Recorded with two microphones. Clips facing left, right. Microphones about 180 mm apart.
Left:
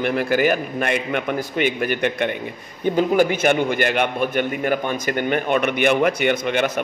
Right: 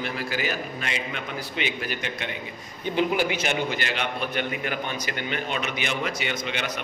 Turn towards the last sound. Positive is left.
turn(degrees=50)  # may be behind; listen again after turning